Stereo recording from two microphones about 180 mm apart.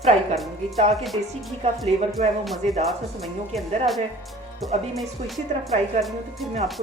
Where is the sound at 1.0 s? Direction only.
Centre (ahead or behind).